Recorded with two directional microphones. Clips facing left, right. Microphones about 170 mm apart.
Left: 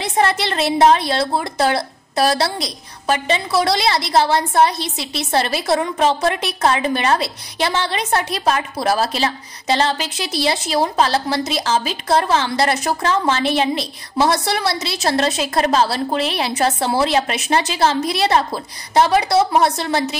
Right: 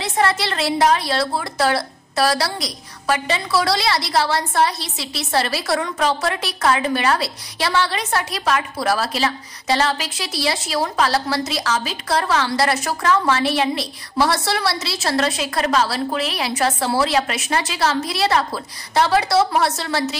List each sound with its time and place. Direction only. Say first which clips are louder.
0.0 s a woman's voice: left 2 dB; 20° left (ahead or behind)